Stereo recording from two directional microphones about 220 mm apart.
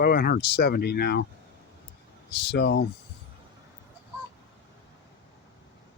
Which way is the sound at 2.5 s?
50° left (ahead or behind).